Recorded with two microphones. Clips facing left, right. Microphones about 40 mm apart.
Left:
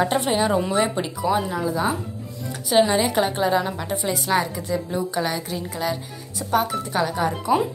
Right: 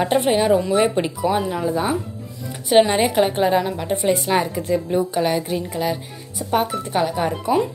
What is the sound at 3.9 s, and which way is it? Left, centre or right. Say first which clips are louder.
Speech: right 5 dB; right.